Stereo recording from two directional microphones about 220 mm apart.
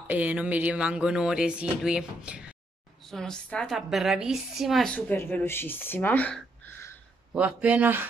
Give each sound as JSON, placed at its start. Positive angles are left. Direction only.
{"t": 0.0, "sound": "a woman's voice", "side_deg": -5}
{"t": 7.3, "sound": "speech", "side_deg": -5}